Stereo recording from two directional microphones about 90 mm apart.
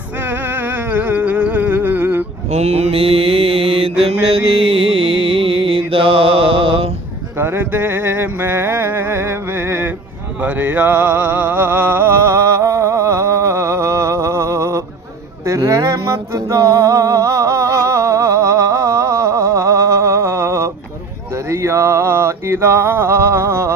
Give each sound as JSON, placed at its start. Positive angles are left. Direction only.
{"t": 0.7, "sound": "humming", "side_deg": -20}
{"t": 2.9, "sound": "mantra", "side_deg": -90}
{"t": 4.0, "sound": "music", "side_deg": -90}
{"t": 7.3, "sound": "music", "side_deg": -25}
{"t": 10.4, "sound": "a sound", "side_deg": -20}
{"t": 15.4, "sound": "music", "side_deg": -35}
{"t": 21.5, "sound": "a sound", "side_deg": -30}